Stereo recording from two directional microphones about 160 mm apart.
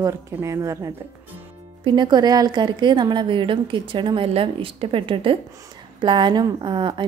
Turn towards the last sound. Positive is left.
turn(degrees=-30)  # may be behind; listen again after turning